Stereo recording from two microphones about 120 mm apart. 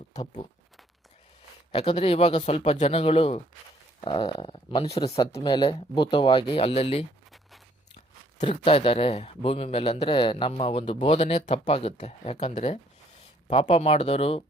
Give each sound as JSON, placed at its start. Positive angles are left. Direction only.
{"t": 0.1, "sound": "speech", "side_deg": 30}
{"t": 1.7, "sound": "speech", "side_deg": 50}
{"t": 4.0, "sound": "a man's voice", "side_deg": 45}
{"t": 4.9, "sound": "a man's voice", "side_deg": 30}
{"t": 8.4, "sound": "a man's voice", "side_deg": 50}
{"t": 10.6, "sound": "speech", "side_deg": 55}
{"t": 13.5, "sound": "speech", "side_deg": 50}